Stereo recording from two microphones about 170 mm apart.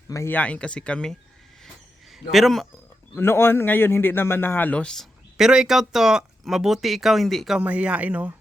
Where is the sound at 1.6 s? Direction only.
Centre (ahead or behind).